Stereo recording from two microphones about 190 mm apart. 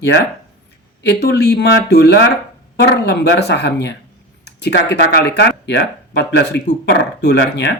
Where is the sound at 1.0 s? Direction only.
60° left (ahead or behind).